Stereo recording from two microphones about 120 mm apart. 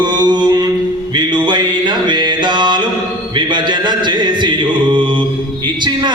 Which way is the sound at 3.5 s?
40° right (ahead or behind).